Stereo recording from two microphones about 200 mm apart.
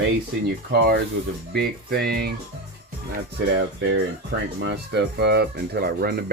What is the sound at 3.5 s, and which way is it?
Speech, 55° right (ahead or behind).